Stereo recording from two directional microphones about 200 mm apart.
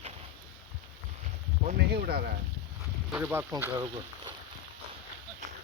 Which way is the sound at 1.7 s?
50° right (ahead or behind).